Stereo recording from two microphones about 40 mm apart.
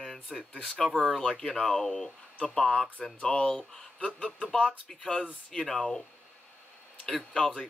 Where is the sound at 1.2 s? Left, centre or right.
Centre.